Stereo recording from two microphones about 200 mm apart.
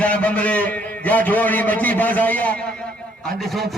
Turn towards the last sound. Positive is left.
turn(degrees=0)  # may be behind; listen again after turning